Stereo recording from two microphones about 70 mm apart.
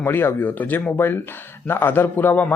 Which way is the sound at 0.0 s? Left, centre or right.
Left.